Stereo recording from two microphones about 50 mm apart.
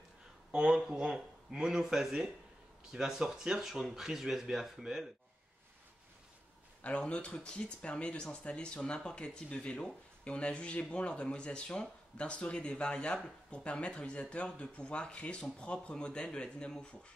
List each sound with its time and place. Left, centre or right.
0.5 s speech: centre
6.8 s speech: left